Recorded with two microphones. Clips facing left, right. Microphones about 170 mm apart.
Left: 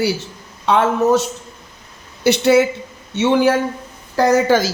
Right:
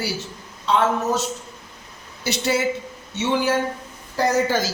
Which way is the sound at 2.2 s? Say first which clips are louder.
Left 9 dB; 60° left (ahead or behind).